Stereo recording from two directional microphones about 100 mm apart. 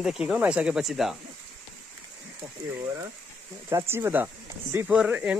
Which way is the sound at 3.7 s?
25° right (ahead or behind).